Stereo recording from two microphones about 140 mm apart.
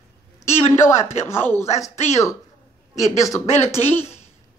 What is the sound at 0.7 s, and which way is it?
Speech, 20° left (ahead or behind).